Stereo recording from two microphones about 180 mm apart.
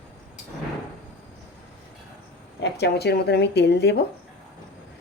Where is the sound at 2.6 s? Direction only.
65° left (ahead or behind).